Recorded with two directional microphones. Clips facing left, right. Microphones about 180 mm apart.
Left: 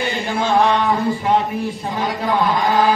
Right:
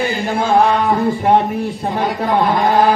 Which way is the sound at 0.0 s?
35° right (ahead or behind).